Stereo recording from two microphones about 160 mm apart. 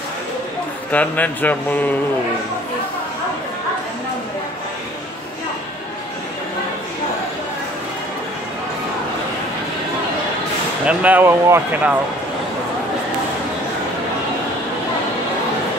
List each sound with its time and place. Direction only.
0.9 s speech: 10° left (ahead or behind)
10.9 s speech: 10° right (ahead or behind)